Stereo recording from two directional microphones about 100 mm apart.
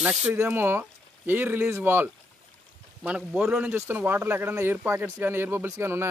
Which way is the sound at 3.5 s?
25° right (ahead or behind).